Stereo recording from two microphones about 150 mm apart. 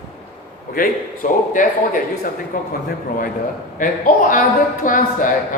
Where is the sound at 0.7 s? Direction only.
65° left (ahead or behind).